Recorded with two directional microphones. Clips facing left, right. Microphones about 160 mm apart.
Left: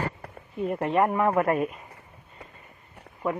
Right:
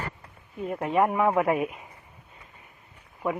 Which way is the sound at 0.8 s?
5° right (ahead or behind).